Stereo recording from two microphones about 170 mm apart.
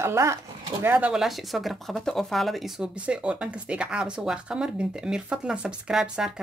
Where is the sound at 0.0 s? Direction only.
15° right (ahead or behind).